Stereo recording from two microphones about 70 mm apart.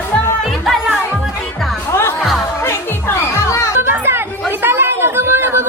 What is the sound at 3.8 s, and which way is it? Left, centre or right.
Chatter, right.